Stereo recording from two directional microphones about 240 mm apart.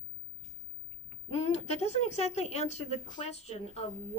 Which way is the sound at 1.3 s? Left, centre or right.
Left.